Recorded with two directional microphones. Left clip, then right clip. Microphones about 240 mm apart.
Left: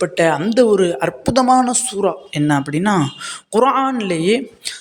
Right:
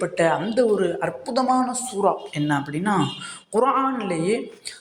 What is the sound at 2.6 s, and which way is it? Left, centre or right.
A man's voice, left.